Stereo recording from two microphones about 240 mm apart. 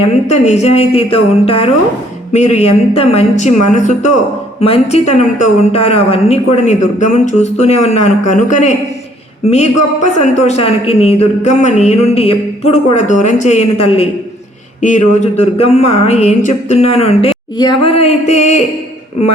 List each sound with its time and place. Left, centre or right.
0.3 s speech: left